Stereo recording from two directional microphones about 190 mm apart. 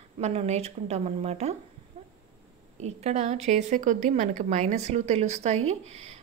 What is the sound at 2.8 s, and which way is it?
A woman's voice, 35° right (ahead or behind).